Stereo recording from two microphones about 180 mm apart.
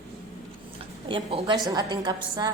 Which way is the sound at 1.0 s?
30° right (ahead or behind).